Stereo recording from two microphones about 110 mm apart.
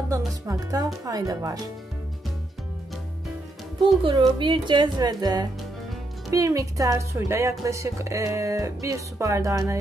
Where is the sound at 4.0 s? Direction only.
45° right (ahead or behind).